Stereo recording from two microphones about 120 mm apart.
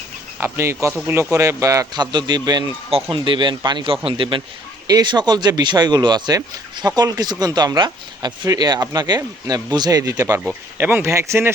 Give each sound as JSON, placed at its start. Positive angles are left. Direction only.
{"t": 0.3, "sound": "a man's voice", "side_deg": -20}
{"t": 10.4, "sound": "speech", "side_deg": -15}